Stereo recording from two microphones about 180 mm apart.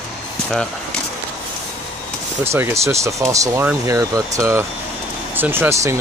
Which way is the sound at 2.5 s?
15° right (ahead or behind).